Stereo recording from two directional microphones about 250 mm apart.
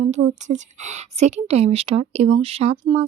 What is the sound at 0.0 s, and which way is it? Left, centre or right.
A woman's voice, right.